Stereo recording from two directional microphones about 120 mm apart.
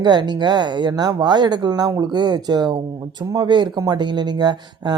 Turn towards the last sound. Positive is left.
turn(degrees=-35)  # may be behind; listen again after turning